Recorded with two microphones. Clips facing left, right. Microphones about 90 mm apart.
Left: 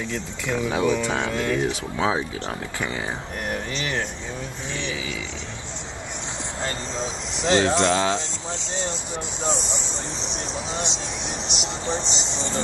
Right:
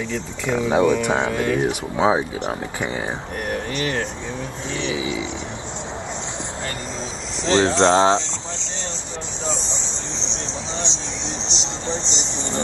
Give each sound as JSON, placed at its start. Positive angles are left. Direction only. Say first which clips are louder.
{"t": 0.1, "sound": "speech", "louder": "right 5 dB", "side_deg": -20}
{"t": 4.7, "sound": "speech", "louder": "right 7 dB", "side_deg": -20}
{"t": 7.4, "sound": "speech", "louder": "right 3 dB", "side_deg": -30}
{"t": 8.5, "sound": "a sound", "louder": "left 3 dB", "side_deg": 10}
{"t": 9.9, "sound": "a sound", "louder": "even", "side_deg": -25}
{"t": 10.7, "sound": "vehicle", "louder": "even", "side_deg": -25}
{"t": 11.2, "sound": "music", "louder": "right 3 dB", "side_deg": 10}
{"t": 11.8, "sound": "speech", "louder": "even", "side_deg": 15}
{"t": 12.4, "sound": "speech", "louder": "right 2 dB", "side_deg": -20}